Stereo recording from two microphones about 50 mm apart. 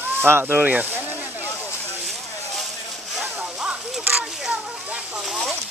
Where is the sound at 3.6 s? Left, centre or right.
Right.